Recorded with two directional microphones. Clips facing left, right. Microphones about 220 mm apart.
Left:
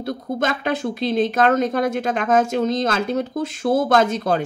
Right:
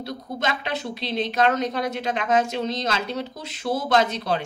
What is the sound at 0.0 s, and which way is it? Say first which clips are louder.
Speech: left 5 dB; 50° left (ahead or behind).